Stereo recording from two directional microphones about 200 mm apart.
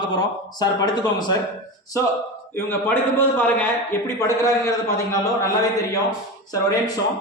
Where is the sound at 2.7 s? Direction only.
10° left (ahead or behind).